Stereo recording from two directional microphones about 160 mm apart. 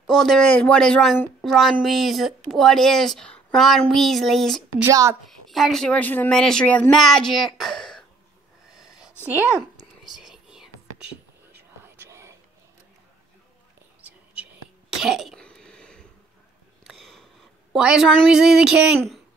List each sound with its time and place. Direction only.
0.0 s speech: 5° left (ahead or behind)
4.8 s a woman's voice: 20° right (ahead or behind)
5.5 s speech: centre (ahead or behind)
8.7 s a sound: 5° right (ahead or behind)
10.0 s whispering: centre (ahead or behind)
11.8 s whispering: 15° right (ahead or behind)
14.0 s sneeze: 10° right (ahead or behind)
16.8 s a sound: centre (ahead or behind)
18.9 s a child's voice: centre (ahead or behind)